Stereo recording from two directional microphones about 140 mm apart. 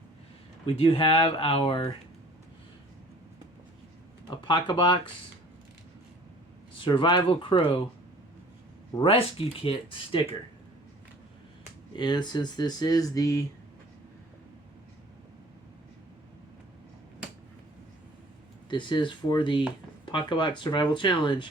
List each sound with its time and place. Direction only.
0.6 s speech: 40° left (ahead or behind)
4.3 s speech: 35° left (ahead or behind)
6.7 s speech: 35° left (ahead or behind)
9.0 s speech: 40° left (ahead or behind)
11.9 s speech: 30° left (ahead or behind)
18.7 s speech: 35° left (ahead or behind)